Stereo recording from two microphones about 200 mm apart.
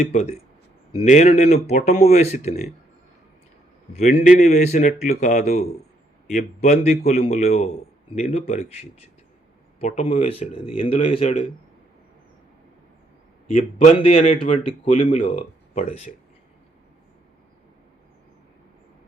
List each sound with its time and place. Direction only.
0.0 s a man's voice: 35° left (ahead or behind)
3.9 s a man's voice: 35° left (ahead or behind)
13.8 s speech: 30° left (ahead or behind)